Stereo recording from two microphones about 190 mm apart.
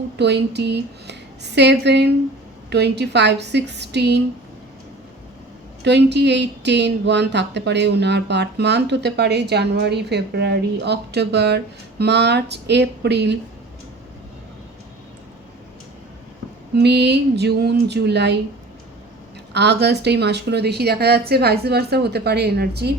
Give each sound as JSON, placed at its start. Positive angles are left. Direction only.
{"t": 0.2, "sound": "speech", "side_deg": -60}
{"t": 5.8, "sound": "speech", "side_deg": -65}
{"t": 16.7, "sound": "speech", "side_deg": -60}
{"t": 19.5, "sound": "speech", "side_deg": -60}